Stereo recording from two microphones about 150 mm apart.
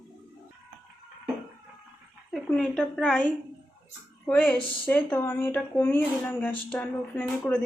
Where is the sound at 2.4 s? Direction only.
5° left (ahead or behind).